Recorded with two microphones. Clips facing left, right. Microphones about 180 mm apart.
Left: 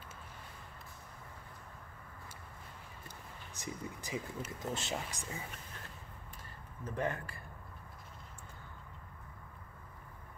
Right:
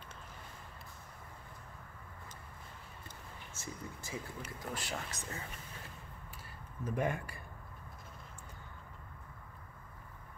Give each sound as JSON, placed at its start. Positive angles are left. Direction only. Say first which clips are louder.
{"t": 3.5, "sound": "speech", "louder": "left 3 dB", "side_deg": 15}
{"t": 6.8, "sound": "speech", "louder": "right 2 dB", "side_deg": -15}